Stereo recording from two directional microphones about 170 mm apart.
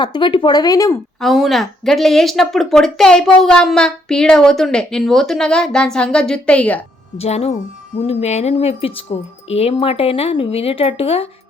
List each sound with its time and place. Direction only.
0.0 s speech: 25° left (ahead or behind)
1.2 s speech: centre (ahead or behind)
7.2 s speech: 35° left (ahead or behind)